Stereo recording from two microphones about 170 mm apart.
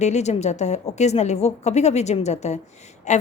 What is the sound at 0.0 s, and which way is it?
A woman's voice, 40° left (ahead or behind).